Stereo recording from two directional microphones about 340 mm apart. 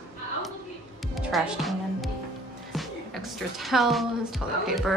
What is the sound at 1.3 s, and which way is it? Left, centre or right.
Speech, centre.